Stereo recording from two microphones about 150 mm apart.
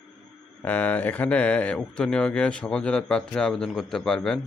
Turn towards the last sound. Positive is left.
turn(degrees=5)  # may be behind; listen again after turning